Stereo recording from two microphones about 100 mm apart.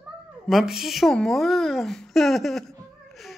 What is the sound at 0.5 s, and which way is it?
A woman's voice, 5° right (ahead or behind).